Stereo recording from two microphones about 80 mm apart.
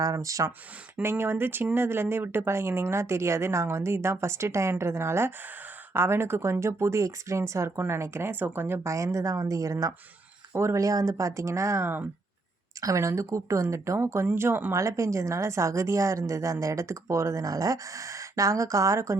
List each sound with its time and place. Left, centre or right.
0.0 s speech: right
1.0 s a woman's voice: right
12.8 s a woman's voice: right